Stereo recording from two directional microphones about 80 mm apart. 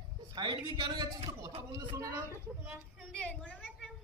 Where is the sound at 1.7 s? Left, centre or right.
Right.